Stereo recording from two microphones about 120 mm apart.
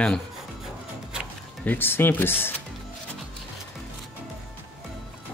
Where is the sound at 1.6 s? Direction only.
15° left (ahead or behind).